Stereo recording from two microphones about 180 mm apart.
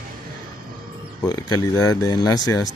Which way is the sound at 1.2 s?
20° left (ahead or behind).